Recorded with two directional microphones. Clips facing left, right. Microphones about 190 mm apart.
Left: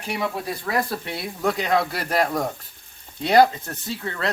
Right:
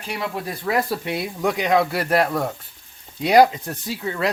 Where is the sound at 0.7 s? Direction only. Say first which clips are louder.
Right 4 dB; 20° right (ahead or behind).